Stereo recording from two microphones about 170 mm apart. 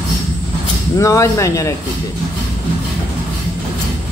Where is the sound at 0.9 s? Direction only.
20° left (ahead or behind).